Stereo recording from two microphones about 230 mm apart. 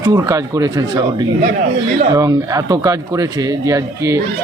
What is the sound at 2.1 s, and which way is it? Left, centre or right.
Speech, centre.